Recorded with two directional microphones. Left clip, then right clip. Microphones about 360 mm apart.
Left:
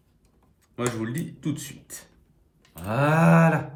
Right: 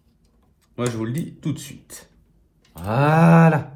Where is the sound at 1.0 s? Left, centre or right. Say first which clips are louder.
Right 3 dB; centre.